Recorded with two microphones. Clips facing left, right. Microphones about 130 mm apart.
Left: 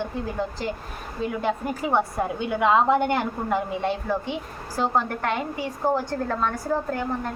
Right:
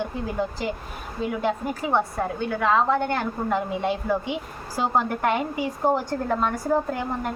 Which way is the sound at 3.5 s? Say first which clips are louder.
Right 1 dB; centre (ahead or behind).